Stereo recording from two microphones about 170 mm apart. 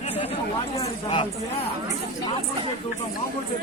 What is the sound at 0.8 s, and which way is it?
Speech, 30° left (ahead or behind).